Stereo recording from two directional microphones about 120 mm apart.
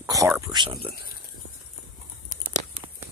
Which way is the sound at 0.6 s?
50° right (ahead or behind).